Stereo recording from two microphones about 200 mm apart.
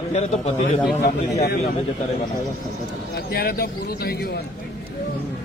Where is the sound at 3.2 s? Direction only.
50° left (ahead or behind).